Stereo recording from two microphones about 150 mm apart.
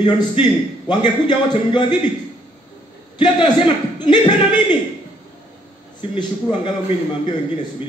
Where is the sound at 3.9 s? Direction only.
30° left (ahead or behind).